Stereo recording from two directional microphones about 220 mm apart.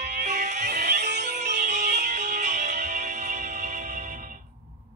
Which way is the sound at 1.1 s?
35° right (ahead or behind).